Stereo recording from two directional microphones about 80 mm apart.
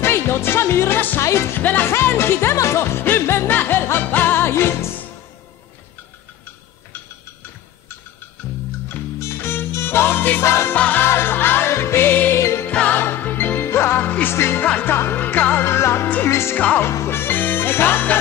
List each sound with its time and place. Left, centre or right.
0.0 s music: left
1.2 s music: left
1.6 s music: left
9.2 s music: left
10.8 s music: left
12.6 s music: left
14.6 s music: left
16.5 s music: left
16.8 s music: left